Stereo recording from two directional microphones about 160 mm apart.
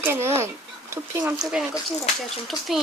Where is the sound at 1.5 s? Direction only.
5° right (ahead or behind).